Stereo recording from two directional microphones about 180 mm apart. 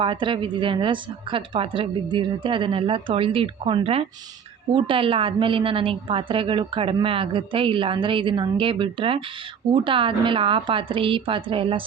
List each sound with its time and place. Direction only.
0.0 s a woman's voice: 25° right (ahead or behind)